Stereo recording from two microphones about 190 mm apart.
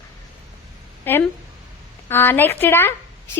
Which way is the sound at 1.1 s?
10° left (ahead or behind).